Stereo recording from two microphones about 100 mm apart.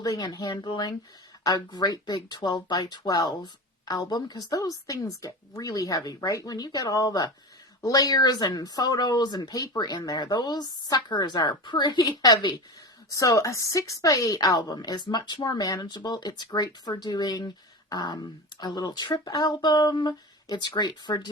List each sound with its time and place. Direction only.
0.0 s speech: 40° left (ahead or behind)